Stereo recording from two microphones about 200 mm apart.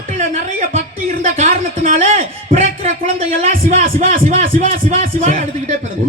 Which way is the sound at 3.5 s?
40° right (ahead or behind).